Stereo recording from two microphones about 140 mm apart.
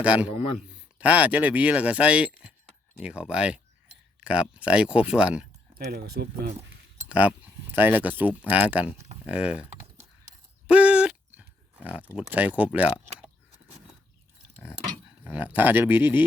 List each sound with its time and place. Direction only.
0.0 s speech: 10° right (ahead or behind)
6.0 s speech: 90° right
7.1 s speech: 10° right (ahead or behind)
10.7 s a sound: 10° right (ahead or behind)
12.1 s speech: 10° right (ahead or behind)
15.2 s speech: 10° right (ahead or behind)